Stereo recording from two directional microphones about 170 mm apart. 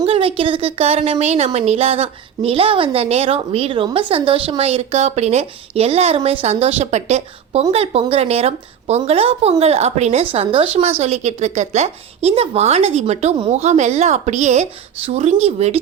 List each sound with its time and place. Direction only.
0.0 s a woman's voice: 30° right (ahead or behind)